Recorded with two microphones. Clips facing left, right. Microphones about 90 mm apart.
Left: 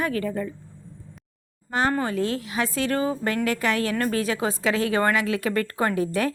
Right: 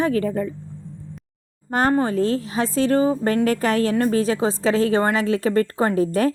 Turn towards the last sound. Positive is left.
turn(degrees=-35)  # may be behind; listen again after turning